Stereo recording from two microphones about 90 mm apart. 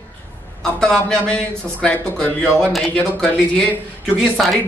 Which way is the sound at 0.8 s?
10° left (ahead or behind).